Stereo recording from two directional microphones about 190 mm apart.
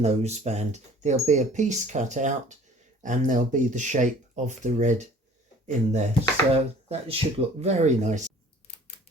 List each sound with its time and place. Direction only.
0.0 s speech: 35° right (ahead or behind)